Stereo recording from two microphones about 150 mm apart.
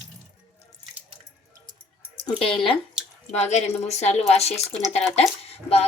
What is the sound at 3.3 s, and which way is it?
Speech, 50° left (ahead or behind).